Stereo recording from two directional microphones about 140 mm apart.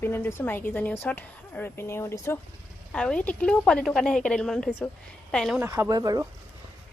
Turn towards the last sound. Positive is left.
turn(degrees=-25)  # may be behind; listen again after turning